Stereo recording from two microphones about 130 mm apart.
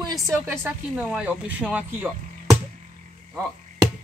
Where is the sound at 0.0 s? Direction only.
25° right (ahead or behind).